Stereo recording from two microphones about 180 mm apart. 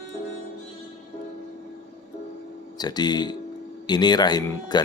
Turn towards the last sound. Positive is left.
turn(degrees=20)  # may be behind; listen again after turning